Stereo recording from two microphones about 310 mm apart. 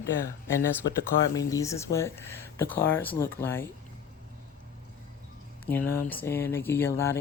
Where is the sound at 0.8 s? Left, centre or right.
Left.